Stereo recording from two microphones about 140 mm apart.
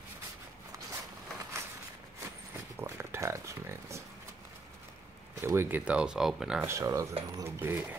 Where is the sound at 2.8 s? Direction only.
15° right (ahead or behind).